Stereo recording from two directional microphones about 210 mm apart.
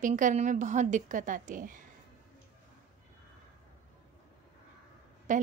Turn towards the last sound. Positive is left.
turn(degrees=-35)  # may be behind; listen again after turning